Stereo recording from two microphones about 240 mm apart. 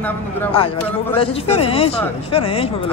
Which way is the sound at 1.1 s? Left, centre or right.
Left.